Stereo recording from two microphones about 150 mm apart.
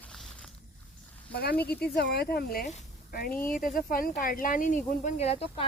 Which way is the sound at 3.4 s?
70° left (ahead or behind).